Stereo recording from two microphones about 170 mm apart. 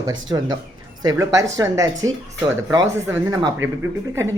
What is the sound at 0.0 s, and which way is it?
Speech, 20° right (ahead or behind).